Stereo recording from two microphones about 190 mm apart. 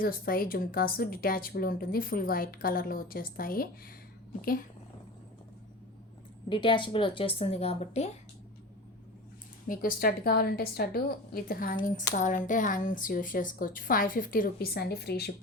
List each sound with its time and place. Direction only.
0.0 s a woman's voice: 50° left (ahead or behind)
6.5 s a woman's voice: 25° left (ahead or behind)
9.6 s a woman's voice: 50° left (ahead or behind)